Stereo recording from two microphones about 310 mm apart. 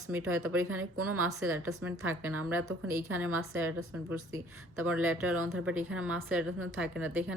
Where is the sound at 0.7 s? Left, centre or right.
Right.